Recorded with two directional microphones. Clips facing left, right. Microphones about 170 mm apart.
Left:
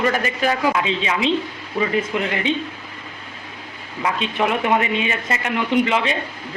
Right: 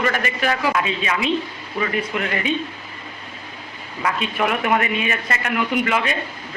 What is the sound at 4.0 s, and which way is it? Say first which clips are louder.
A man's voice: left 1 dB; 20° left (ahead or behind).